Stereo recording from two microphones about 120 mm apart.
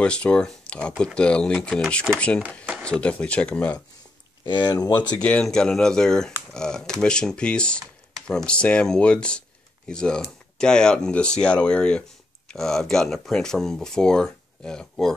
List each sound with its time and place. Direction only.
0.0 s speech: 10° left (ahead or behind)
4.5 s speech: 40° left (ahead or behind)
5.2 s speech: 5° left (ahead or behind)